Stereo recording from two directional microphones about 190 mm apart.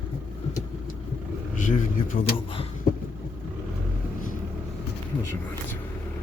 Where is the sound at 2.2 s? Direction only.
45° left (ahead or behind).